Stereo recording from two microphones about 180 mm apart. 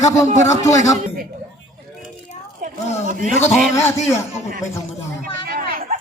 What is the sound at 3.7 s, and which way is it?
Speech, 15° left (ahead or behind).